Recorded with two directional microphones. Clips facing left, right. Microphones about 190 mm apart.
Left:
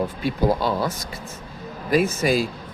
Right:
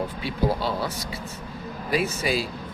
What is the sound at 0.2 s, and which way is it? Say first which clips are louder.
Speech: left 4 dB; 45° left (ahead or behind).